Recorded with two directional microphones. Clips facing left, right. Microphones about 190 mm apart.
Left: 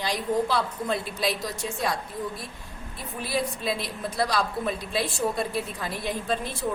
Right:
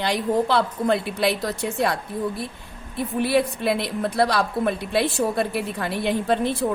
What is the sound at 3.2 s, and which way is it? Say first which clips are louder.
A woman's voice: right 8 dB; 65° right (ahead or behind).